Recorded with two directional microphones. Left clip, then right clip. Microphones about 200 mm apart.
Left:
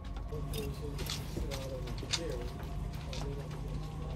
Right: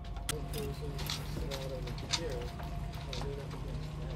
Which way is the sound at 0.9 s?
35° right (ahead or behind).